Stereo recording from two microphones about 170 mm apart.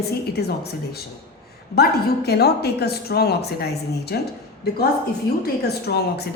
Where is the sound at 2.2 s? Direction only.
70° left (ahead or behind).